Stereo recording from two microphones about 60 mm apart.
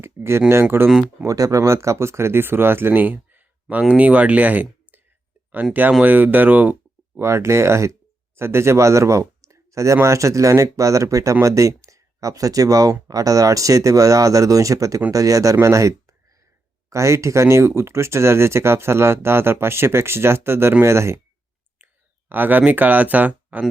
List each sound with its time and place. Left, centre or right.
0.0 s speech: right
1.2 s speech: right
6.0 s speech: right
7.2 s speech: right
21.8 s clicking: right
22.3 s speech: right